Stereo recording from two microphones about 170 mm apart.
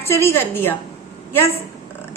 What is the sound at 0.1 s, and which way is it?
Speech, 15° left (ahead or behind).